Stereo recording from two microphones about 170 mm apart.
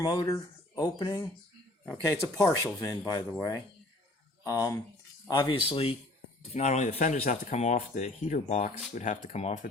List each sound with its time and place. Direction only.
0.0 s speech: 25° left (ahead or behind)
4.4 s speech: 20° left (ahead or behind); by 9.6 s 40° left (ahead or behind)